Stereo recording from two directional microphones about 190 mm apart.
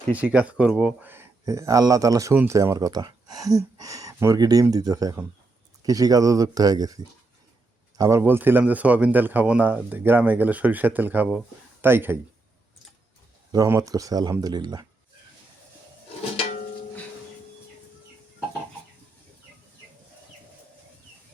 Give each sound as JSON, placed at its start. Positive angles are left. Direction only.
{"t": 0.1, "sound": "speech", "side_deg": -10}
{"t": 13.5, "sound": "speech", "side_deg": -15}